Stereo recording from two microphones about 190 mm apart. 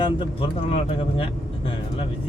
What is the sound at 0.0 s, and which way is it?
Speech, 25° left (ahead or behind).